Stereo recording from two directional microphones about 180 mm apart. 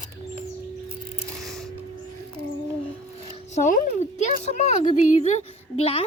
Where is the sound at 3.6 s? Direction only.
45° left (ahead or behind).